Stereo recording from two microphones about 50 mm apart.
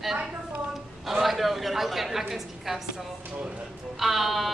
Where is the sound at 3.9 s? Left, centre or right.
Centre.